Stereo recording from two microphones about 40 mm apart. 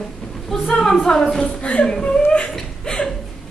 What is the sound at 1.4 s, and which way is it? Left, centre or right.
Chuckle, left.